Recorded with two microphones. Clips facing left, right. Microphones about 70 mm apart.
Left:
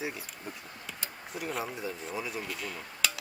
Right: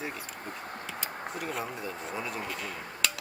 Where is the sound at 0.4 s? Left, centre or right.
Right.